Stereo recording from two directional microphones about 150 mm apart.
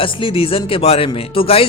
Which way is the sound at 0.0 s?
35° left (ahead or behind).